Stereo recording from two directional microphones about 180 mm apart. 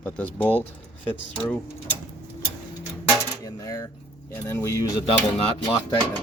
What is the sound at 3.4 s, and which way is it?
Speech, 20° left (ahead or behind).